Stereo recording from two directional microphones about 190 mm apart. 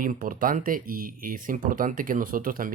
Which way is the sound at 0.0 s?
45° right (ahead or behind).